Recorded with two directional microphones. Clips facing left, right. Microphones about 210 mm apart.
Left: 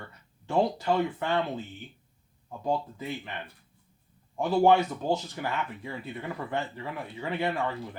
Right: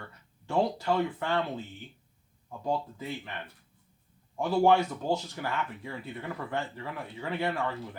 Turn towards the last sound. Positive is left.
turn(degrees=15)  # may be behind; listen again after turning